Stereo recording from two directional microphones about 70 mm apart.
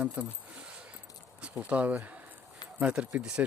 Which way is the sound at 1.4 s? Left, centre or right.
Centre.